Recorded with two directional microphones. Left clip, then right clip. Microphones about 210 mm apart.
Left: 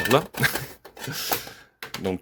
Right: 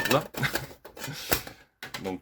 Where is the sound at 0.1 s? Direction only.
40° left (ahead or behind).